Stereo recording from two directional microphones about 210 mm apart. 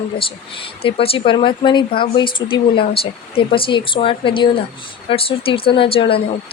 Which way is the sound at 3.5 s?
25° left (ahead or behind).